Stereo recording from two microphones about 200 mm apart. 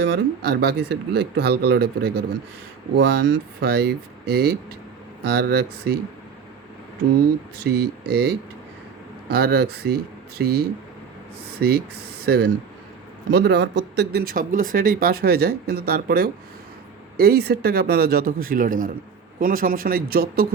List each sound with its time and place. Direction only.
0.0 s speech: 55° right (ahead or behind)
7.2 s speech: 55° right (ahead or behind)